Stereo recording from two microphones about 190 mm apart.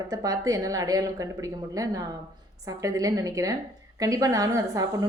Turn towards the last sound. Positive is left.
turn(degrees=-20)  # may be behind; listen again after turning